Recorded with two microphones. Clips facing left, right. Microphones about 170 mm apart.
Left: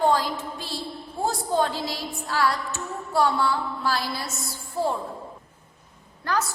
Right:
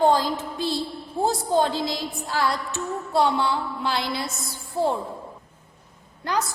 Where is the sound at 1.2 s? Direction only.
20° right (ahead or behind).